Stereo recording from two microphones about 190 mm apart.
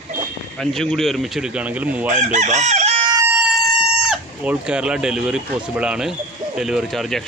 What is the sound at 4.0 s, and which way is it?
Speech, 5° right (ahead or behind).